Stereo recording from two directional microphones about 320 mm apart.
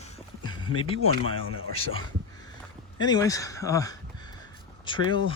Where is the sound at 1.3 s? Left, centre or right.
Left.